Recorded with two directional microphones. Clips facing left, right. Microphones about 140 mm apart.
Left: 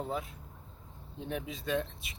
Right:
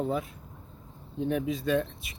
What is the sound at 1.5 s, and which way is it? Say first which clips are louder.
Speech: right 6 dB; 25° left (ahead or behind).